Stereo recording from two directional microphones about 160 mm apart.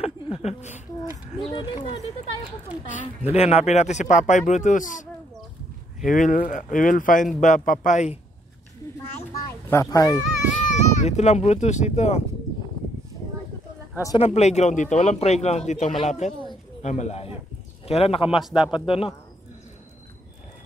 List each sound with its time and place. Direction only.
0.0 s a sound: 40° left (ahead or behind)
1.5 s speech: 30° left (ahead or behind)
3.3 s a man's voice: 40° left (ahead or behind)
6.0 s a man's voice: 55° left (ahead or behind)
9.5 s speech: 20° left (ahead or behind)
10.5 s speech: 50° left (ahead or behind)
14.1 s a man's voice: 40° left (ahead or behind)
18.4 s speech: 5° right (ahead or behind)
18.9 s speech: 35° left (ahead or behind)